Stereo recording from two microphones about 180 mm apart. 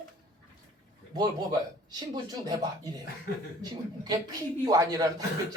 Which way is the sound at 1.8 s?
20° right (ahead or behind).